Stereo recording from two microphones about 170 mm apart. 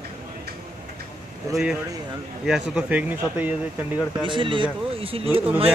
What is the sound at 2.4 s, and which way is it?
Speech, 5° right (ahead or behind).